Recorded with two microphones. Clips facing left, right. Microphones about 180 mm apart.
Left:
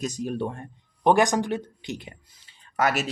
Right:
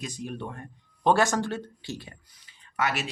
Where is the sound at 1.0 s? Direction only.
15° left (ahead or behind).